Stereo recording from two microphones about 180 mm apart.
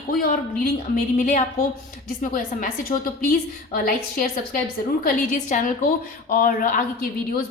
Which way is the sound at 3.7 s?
55° left (ahead or behind).